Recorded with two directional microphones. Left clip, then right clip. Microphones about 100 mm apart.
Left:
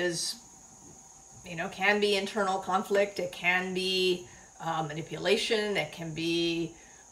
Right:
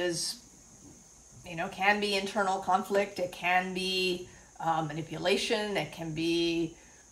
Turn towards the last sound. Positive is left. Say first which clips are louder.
# even
turn(degrees=-30)  # may be behind; listen again after turning